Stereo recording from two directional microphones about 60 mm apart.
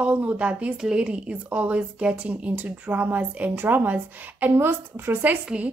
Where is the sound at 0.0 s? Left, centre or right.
Right.